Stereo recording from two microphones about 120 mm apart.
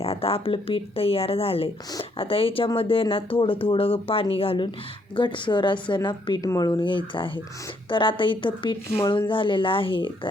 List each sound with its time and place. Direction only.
0.0 s speech: 55° left (ahead or behind)